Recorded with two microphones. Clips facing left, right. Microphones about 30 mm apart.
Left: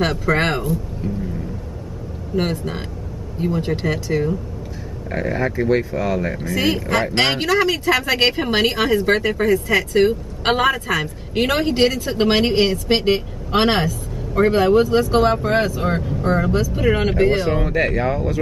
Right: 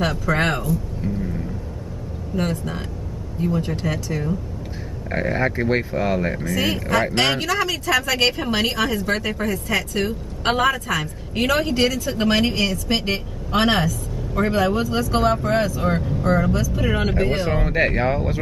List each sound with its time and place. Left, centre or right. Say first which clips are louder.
0.0 s speech: left 2 dB; left
1.0 s a sound: even; centre
2.3 s speech: left 3 dB; left
5.1 s speech: even; centre
6.5 s speech: left 2 dB; left
8.3 s speech: left 3 dB; left
8.6 s speech: left 4 dB; left
15.8 s speech: left 1 dB; centre
16.2 s speech: left 2 dB; left
17.6 s speech: left 1 dB; centre